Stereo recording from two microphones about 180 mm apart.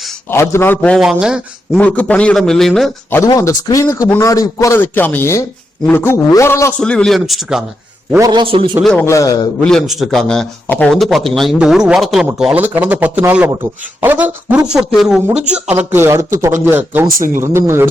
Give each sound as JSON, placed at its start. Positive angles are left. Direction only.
{"t": 0.3, "sound": "a man's voice", "side_deg": 15}
{"t": 1.8, "sound": "a man's voice", "side_deg": 10}
{"t": 3.2, "sound": "a man's voice", "side_deg": 20}
{"t": 8.1, "sound": "a man's voice", "side_deg": -20}
{"t": 8.7, "sound": "a man's voice", "side_deg": 0}
{"t": 9.0, "sound": "a man's voice", "side_deg": 20}
{"t": 9.6, "sound": "a man's voice", "side_deg": 5}
{"t": 15.4, "sound": "speech", "side_deg": -35}
{"t": 15.6, "sound": "speech", "side_deg": -10}
{"t": 17.2, "sound": "speech", "side_deg": -50}
{"t": 17.4, "sound": "speech", "side_deg": -15}